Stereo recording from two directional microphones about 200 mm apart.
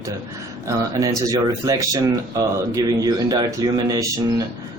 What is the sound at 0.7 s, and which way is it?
Speech, 15° right (ahead or behind).